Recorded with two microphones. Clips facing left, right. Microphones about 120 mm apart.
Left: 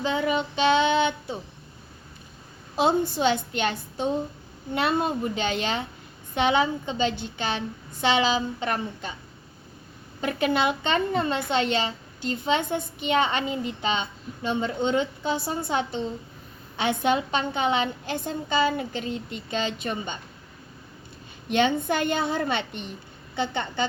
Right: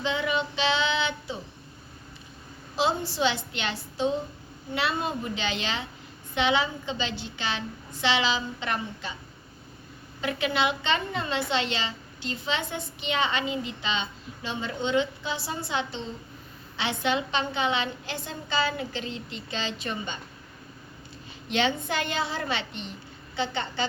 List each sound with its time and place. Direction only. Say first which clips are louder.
0.0 s female singing: left 3 dB; 40° left (ahead or behind)
2.7 s a woman's voice: left 4 dB; 50° left (ahead or behind)
10.2 s a woman's voice: left 3 dB; 45° left (ahead or behind)
21.5 s a woman's voice: left 4 dB; 50° left (ahead or behind)